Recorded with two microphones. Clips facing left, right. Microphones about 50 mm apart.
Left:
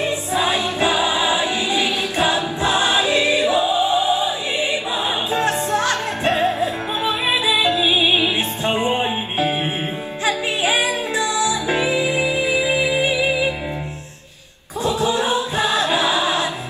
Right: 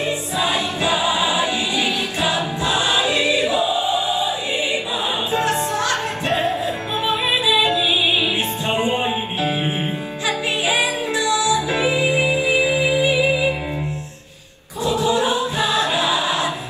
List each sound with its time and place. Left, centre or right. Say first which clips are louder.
0.0 s choir: left 1 dB; left
5.3 s music: left 1 dB; left
8.8 s music: even; left
11.8 s music: right 1 dB; right
12.3 s music: right 1 dB; left
14.8 s a sound: right 1 dB; left
15.5 s choir: left 1 dB; left